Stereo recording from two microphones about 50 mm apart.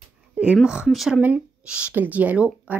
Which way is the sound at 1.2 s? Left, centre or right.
Right.